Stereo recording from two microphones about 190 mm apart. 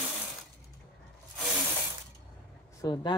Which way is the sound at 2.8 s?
20° left (ahead or behind).